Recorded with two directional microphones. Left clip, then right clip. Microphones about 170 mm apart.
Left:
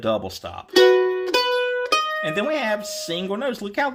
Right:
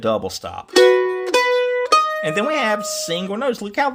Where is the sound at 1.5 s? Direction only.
30° right (ahead or behind).